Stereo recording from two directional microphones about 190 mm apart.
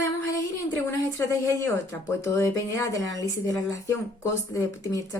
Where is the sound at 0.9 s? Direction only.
15° left (ahead or behind).